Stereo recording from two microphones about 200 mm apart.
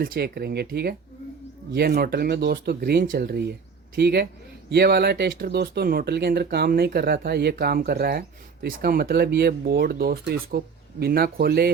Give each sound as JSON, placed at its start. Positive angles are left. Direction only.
{"t": 0.0, "sound": "speech", "side_deg": -50}